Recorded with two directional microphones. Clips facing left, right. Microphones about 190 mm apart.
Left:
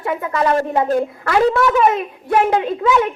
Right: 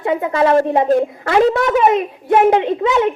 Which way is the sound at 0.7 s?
25° right (ahead or behind).